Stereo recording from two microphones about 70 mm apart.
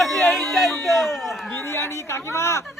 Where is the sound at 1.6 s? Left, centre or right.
Left.